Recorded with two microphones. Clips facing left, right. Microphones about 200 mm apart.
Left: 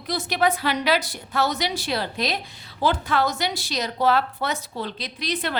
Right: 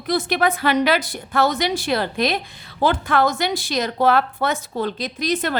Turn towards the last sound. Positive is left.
turn(degrees=-45)  # may be behind; listen again after turning